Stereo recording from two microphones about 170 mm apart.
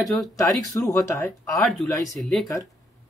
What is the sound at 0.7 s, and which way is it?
Speech, 20° left (ahead or behind).